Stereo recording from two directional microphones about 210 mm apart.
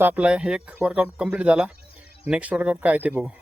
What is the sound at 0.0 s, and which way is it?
Speech, 10° right (ahead or behind).